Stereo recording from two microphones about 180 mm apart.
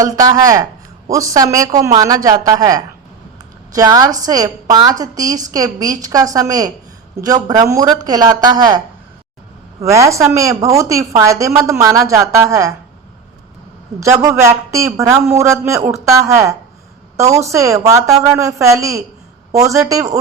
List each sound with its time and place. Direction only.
0.0 s a woman's voice: 20° right (ahead or behind)
9.8 s a woman's voice: 15° right (ahead or behind)
14.0 s a woman's voice: 15° right (ahead or behind)